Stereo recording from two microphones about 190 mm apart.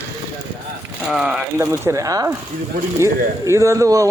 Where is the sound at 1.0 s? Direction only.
5° right (ahead or behind).